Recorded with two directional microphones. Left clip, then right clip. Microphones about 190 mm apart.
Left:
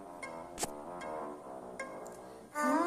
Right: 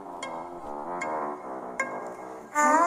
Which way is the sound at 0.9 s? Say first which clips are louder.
Right 11 dB; 35° right (ahead or behind).